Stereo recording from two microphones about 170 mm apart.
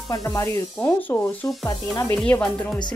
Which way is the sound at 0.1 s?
15° left (ahead or behind).